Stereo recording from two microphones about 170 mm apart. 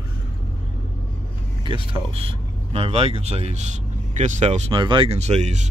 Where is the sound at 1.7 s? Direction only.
30° right (ahead or behind).